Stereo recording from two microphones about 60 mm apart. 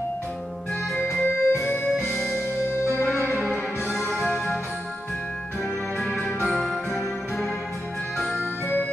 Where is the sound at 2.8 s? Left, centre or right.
Left.